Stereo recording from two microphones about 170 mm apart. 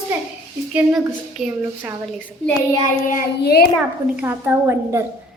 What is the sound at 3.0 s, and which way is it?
Speech, 55° left (ahead or behind).